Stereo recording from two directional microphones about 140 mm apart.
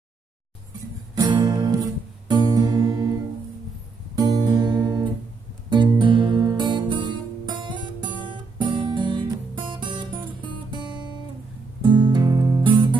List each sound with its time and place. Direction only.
1.1 s guitar: 30° right (ahead or behind)
4.1 s guitar: 30° right (ahead or behind)
5.7 s music: 35° right (ahead or behind)